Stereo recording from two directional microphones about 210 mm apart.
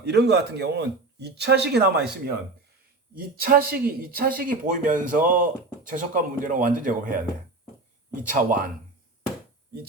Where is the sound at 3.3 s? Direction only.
45° right (ahead or behind).